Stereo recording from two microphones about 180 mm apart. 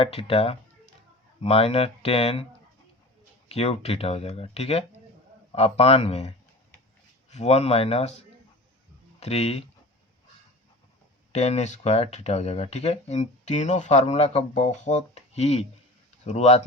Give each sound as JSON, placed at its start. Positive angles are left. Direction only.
{"t": 0.0, "sound": "speech", "side_deg": 30}
{"t": 3.5, "sound": "speech", "side_deg": 35}
{"t": 9.2, "sound": "speech", "side_deg": 35}
{"t": 11.3, "sound": "speech", "side_deg": 35}